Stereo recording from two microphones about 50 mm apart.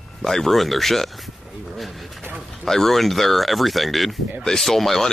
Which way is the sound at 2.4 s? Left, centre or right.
Centre.